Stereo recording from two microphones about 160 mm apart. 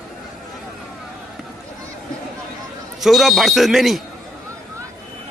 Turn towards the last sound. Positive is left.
turn(degrees=0)  # may be behind; listen again after turning